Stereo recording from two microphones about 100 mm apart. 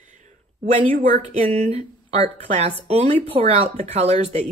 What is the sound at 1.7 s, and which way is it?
Speech, 80° right.